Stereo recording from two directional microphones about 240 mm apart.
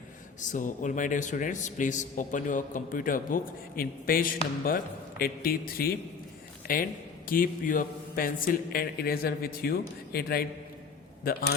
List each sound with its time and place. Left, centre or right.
0.3 s a man's voice: left
7.3 s a man's voice: left